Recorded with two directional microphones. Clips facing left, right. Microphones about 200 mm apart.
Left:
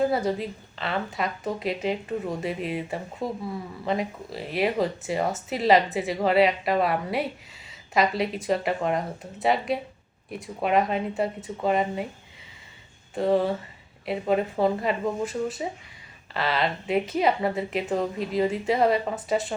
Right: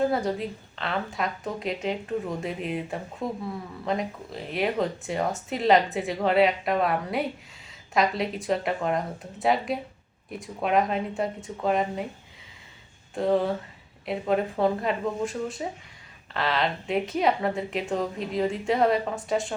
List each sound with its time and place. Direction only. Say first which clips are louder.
0.0 s speech: left 1 dB; centre (ahead or behind)
13.1 s speech: left 1 dB; centre (ahead or behind)